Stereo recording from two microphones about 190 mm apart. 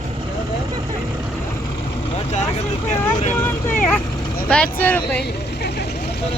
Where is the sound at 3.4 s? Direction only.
10° left (ahead or behind).